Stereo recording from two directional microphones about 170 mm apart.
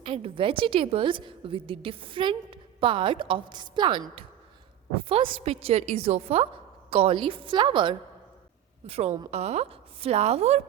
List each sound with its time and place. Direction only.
0.0 s a woman's voice: 35° right (ahead or behind)